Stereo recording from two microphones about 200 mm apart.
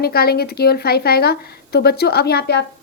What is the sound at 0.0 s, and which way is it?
Speech, 50° left (ahead or behind).